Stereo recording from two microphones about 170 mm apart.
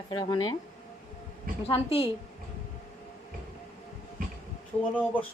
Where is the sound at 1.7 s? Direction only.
35° left (ahead or behind).